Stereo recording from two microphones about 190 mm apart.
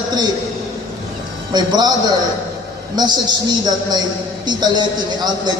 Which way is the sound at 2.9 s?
20° right (ahead or behind).